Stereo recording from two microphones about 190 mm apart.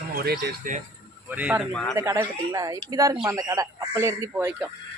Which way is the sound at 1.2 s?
10° right (ahead or behind).